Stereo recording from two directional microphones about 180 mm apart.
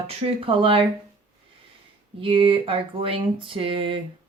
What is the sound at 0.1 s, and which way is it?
Speech, 35° right (ahead or behind).